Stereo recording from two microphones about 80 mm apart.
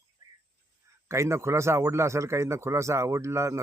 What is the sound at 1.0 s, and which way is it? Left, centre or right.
Speech, right.